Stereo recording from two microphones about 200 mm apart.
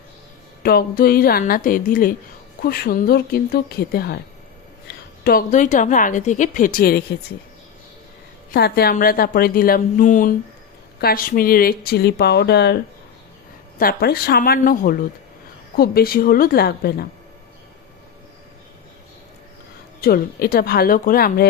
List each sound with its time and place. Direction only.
0.6 s a woman's voice: 50° left (ahead or behind)
8.4 s a woman's voice: 50° left (ahead or behind)
20.0 s a woman's voice: 50° left (ahead or behind)